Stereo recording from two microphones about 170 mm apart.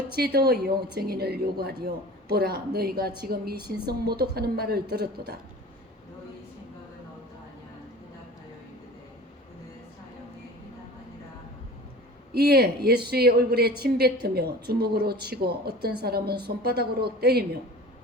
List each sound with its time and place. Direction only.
0.2 s a woman's voice: 65° right (ahead or behind)
12.3 s a woman's voice: 70° right (ahead or behind)